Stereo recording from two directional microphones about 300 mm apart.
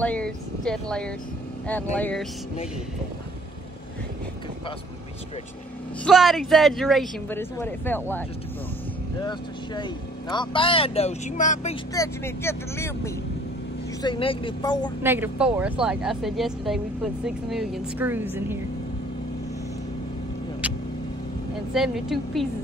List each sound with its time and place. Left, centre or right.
0.0 s speech: centre
6.0 s speech: centre
9.2 s speech: centre
15.0 s speech: centre
21.7 s speech: centre